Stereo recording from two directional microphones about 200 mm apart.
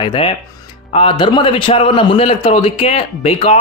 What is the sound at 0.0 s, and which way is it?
A man's voice, 25° left (ahead or behind).